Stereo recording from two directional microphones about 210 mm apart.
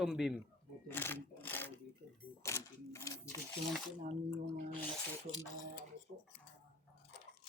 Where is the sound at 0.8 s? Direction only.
10° left (ahead or behind).